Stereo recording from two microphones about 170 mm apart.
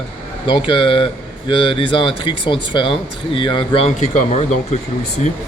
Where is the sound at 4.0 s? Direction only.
45° left (ahead or behind).